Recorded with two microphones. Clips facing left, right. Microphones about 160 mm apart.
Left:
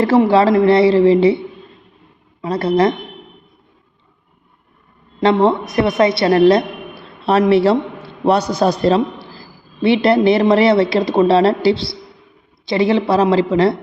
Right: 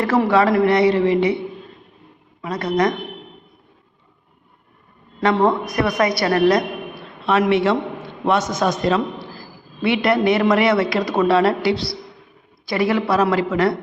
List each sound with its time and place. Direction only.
0.0 s a man's voice: 30° left (ahead or behind)
2.4 s a man's voice: 30° left (ahead or behind)
5.2 s a man's voice: 25° left (ahead or behind)